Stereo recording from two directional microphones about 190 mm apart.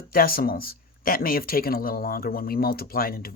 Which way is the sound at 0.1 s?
50° left (ahead or behind).